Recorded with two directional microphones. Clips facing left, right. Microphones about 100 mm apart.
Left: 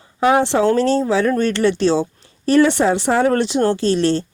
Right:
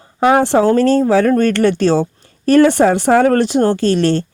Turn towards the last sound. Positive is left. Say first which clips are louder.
# right 3 dB
turn(degrees=-60)  # may be behind; listen again after turning